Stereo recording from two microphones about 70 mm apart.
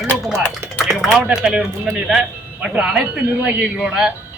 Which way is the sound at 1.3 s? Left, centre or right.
Centre.